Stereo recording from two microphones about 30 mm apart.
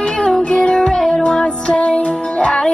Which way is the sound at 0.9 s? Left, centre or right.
Centre.